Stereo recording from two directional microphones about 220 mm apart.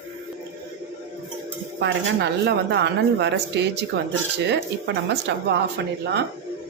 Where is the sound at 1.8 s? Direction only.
50° right (ahead or behind).